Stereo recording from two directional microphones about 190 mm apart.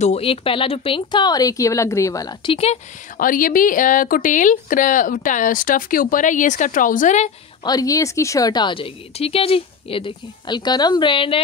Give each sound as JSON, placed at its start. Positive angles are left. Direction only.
{"t": 0.0, "sound": "speech", "side_deg": 30}
{"t": 3.2, "sound": "speech", "side_deg": 45}
{"t": 7.6, "sound": "speech", "side_deg": 20}